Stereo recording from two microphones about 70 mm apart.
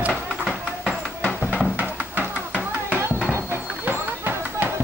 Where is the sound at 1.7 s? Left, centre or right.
Right.